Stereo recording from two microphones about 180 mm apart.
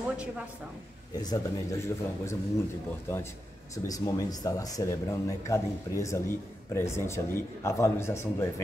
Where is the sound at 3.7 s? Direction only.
20° left (ahead or behind).